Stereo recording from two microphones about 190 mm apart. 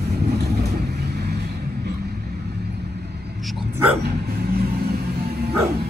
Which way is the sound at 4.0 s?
55° right (ahead or behind).